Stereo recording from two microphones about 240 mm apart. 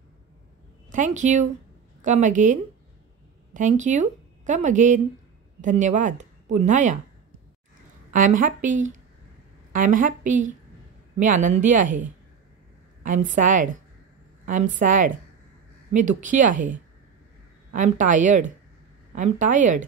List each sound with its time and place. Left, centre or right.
0.9 s a woman's voice: right
8.1 s speech: right
13.0 s speech: right
17.7 s speech: right